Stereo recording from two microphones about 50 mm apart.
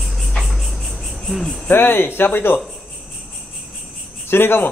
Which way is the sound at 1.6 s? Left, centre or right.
Left.